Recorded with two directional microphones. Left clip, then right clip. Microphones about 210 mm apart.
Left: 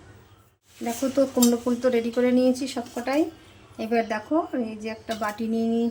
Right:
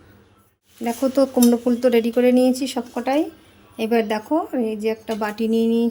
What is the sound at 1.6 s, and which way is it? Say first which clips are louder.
A woman's voice: right 5 dB; 45° right (ahead or behind).